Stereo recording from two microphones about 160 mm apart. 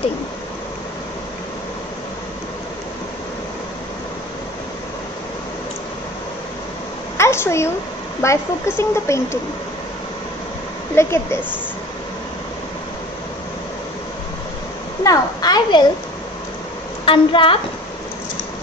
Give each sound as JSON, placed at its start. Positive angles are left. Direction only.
{"t": 7.2, "sound": "a woman's voice", "side_deg": 15}
{"t": 11.0, "sound": "a woman's voice", "side_deg": 15}
{"t": 15.0, "sound": "a child's voice", "side_deg": 25}
{"t": 17.0, "sound": "a woman's voice", "side_deg": 30}